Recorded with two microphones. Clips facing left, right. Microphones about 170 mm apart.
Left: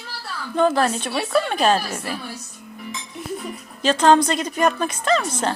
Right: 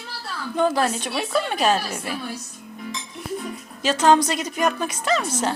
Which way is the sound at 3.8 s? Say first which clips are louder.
Left 2 dB; 10° right (ahead or behind).